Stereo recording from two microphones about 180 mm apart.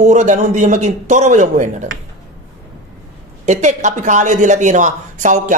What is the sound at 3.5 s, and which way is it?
Speech, 40° right (ahead or behind).